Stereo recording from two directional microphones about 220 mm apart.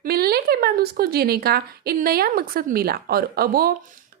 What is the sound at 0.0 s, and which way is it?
A woman's voice, 45° right (ahead or behind).